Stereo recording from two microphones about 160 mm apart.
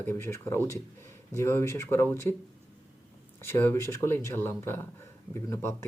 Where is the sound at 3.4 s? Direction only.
15° left (ahead or behind).